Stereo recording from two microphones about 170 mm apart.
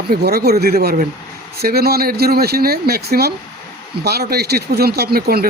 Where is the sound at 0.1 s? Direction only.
65° right (ahead or behind).